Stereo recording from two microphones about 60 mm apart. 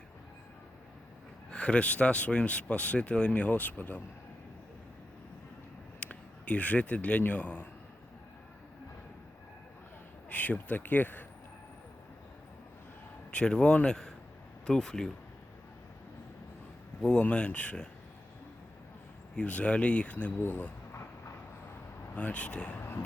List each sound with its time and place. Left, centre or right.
1.5 s speech: centre
6.0 s speech: left
10.2 s speech: left
13.3 s speech: centre
17.0 s speech: centre
19.4 s speech: left
22.1 s speech: left
22.8 s vehicle: left